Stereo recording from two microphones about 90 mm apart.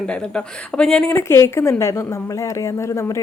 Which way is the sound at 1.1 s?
30° left (ahead or behind).